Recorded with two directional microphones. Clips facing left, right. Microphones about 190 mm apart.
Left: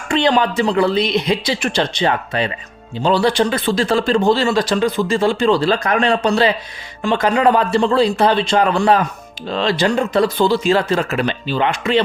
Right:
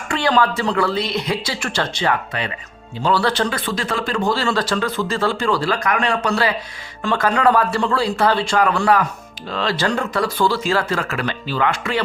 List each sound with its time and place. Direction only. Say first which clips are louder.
0.1 s speech: left 3 dB; 20° left (ahead or behind)